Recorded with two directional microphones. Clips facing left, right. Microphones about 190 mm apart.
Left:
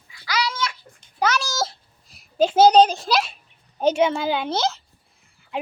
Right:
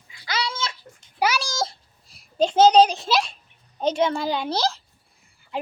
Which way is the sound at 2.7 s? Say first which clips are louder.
Left 1 dB; centre (ahead or behind).